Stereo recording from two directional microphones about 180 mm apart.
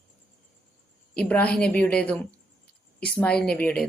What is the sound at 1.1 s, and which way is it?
A woman's voice, 10° left (ahead or behind).